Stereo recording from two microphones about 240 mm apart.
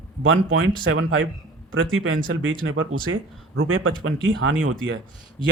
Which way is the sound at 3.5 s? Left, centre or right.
Right.